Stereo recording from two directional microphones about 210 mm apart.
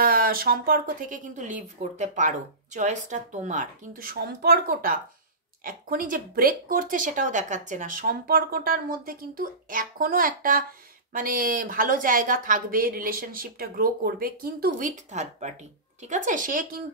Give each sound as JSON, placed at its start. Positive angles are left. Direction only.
{"t": 0.0, "sound": "speech", "side_deg": -45}